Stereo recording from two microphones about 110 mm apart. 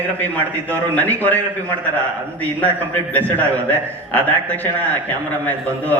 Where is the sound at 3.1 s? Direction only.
15° left (ahead or behind).